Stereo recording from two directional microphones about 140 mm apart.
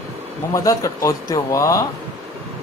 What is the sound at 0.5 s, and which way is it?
Speech, 25° left (ahead or behind).